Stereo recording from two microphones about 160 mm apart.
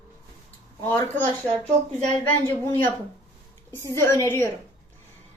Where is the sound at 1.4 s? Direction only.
10° left (ahead or behind).